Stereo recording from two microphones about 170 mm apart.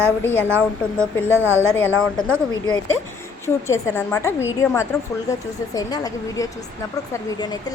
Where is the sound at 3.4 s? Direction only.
15° left (ahead or behind).